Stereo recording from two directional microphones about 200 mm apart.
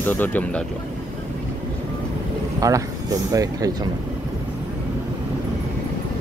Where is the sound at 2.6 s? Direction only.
15° right (ahead or behind).